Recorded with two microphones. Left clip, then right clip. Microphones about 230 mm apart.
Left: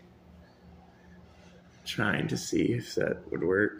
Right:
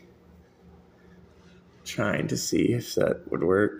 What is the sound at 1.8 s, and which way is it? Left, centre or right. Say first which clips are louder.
Speech: right 2 dB; centre.